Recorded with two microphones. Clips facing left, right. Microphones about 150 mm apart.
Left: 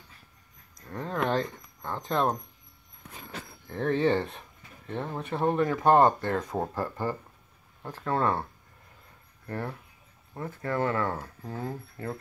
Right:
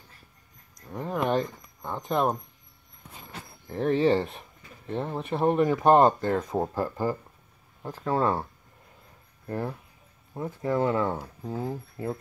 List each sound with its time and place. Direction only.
0.8 s a sound: 10° right (ahead or behind)
3.6 s speech: 10° right (ahead or behind)
4.2 s speech: 25° right (ahead or behind)
4.8 s speech: 10° right (ahead or behind)
6.5 s speech: 10° right (ahead or behind)
9.5 s speech: 15° right (ahead or behind)